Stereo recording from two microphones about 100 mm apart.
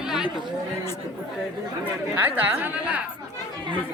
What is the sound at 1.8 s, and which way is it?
Speech, 20° right (ahead or behind).